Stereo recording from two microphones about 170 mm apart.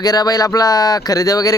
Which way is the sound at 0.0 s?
25° left (ahead or behind).